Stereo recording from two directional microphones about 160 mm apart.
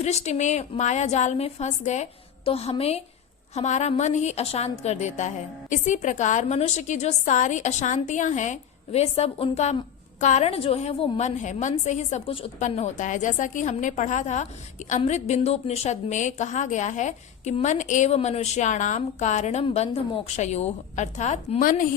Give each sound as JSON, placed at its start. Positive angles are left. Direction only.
{"t": 0.0, "sound": "a woman's voice", "side_deg": 45}